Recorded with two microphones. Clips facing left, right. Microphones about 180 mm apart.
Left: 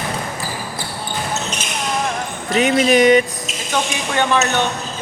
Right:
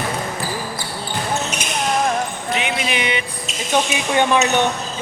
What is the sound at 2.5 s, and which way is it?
Speech, 40° left (ahead or behind).